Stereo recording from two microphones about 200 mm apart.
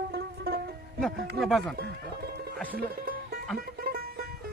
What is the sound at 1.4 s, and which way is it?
Speech, centre (ahead or behind).